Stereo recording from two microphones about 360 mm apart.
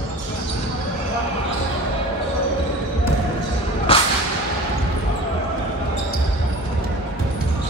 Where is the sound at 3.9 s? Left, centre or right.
Centre.